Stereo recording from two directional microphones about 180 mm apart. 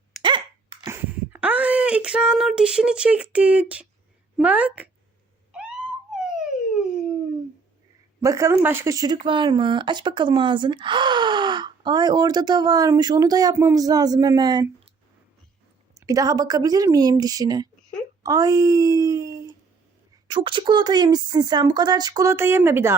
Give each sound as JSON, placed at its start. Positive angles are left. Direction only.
{"t": 0.2, "sound": "hiccup", "side_deg": -25}
{"t": 0.9, "sound": "a sound", "side_deg": -10}
{"t": 4.4, "sound": "a woman's voice", "side_deg": -10}
{"t": 5.5, "sound": "a sound", "side_deg": -5}
{"t": 8.2, "sound": "a woman's voice", "side_deg": -15}
{"t": 16.0, "sound": "speech", "side_deg": -20}